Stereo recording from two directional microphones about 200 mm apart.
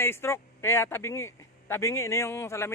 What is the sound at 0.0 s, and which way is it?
A man's voice, 10° left (ahead or behind).